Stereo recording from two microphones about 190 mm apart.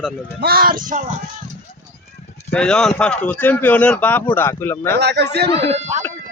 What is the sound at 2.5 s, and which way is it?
Speech, 5° left (ahead or behind).